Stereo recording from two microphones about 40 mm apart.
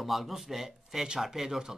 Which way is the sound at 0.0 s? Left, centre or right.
Centre.